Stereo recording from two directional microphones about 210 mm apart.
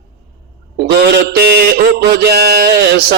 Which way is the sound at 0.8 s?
50° right (ahead or behind).